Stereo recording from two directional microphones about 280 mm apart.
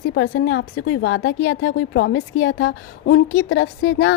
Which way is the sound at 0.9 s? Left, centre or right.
Left.